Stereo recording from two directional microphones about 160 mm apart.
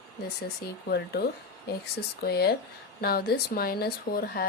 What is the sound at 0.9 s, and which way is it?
Speech, 90° left.